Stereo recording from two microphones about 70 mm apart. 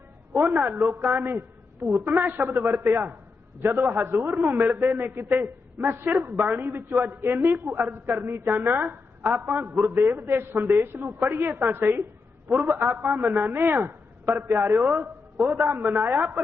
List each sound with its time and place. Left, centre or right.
0.8 s a woman's voice: right
7.2 s a woman's voice: right
10.2 s a woman's voice: right
13.8 s a man's voice: right
15.5 s a woman's voice: right